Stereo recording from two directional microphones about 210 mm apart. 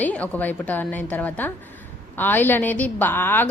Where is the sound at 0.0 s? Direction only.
5° left (ahead or behind).